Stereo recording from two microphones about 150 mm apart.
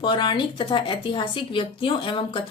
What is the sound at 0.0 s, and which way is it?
A woman's voice, 30° left (ahead or behind).